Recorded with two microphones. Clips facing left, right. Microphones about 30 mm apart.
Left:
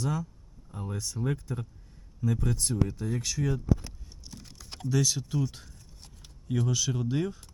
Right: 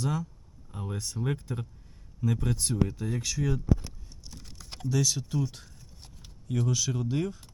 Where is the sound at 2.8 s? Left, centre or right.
Centre.